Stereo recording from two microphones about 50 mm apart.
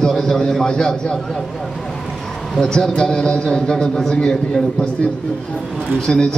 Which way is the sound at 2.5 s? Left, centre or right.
Centre.